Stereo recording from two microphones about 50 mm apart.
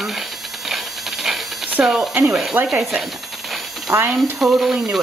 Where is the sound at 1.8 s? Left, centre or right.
Right.